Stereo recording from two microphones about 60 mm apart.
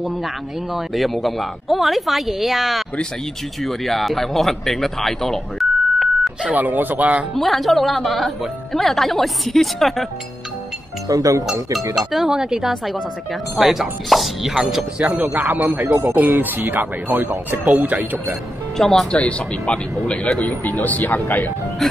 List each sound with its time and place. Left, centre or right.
0.7 s speech: centre
6.5 s speech: right
7.3 s speech: centre
11.1 s speech: right
12.1 s speech: centre
15.2 s speech: right
18.8 s speech: centre
19.1 s speech: centre